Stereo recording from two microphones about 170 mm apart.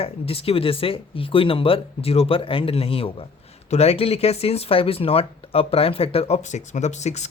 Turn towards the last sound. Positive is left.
turn(degrees=40)  # may be behind; listen again after turning